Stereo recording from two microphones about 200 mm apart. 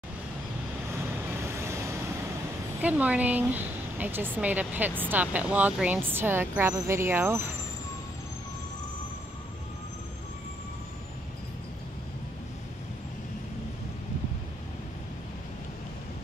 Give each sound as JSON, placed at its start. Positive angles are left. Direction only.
{"t": 1.4, "sound": "vehicle", "side_deg": -15}
{"t": 2.8, "sound": "a woman's voice", "side_deg": -5}